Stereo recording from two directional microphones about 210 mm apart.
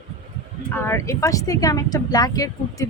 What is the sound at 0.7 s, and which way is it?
A woman's voice, 10° left (ahead or behind).